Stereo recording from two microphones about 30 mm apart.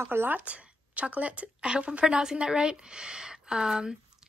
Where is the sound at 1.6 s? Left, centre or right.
Right.